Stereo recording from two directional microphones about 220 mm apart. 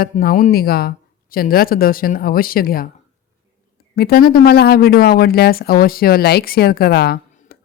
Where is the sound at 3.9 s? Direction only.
45° left (ahead or behind).